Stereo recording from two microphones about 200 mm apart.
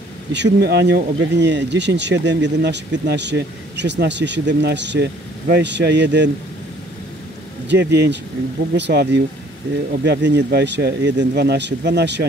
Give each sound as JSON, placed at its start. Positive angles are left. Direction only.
{"t": 0.3, "sound": "speech", "side_deg": -60}
{"t": 7.6, "sound": "speech", "side_deg": -60}